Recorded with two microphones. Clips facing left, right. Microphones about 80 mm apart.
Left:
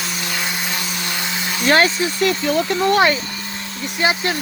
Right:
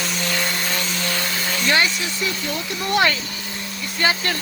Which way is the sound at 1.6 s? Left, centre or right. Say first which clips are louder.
Left 5 dB; left.